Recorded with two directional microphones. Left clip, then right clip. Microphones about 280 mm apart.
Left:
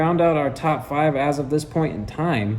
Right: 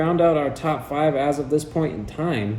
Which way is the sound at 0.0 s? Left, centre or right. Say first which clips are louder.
Even; centre.